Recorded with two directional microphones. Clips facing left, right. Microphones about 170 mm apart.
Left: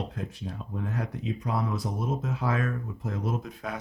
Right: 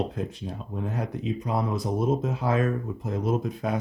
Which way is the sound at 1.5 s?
20° right (ahead or behind).